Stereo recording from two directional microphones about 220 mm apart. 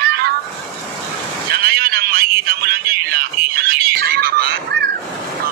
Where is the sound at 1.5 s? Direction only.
45° right (ahead or behind).